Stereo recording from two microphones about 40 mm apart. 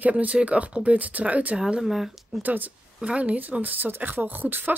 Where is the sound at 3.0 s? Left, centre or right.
Right.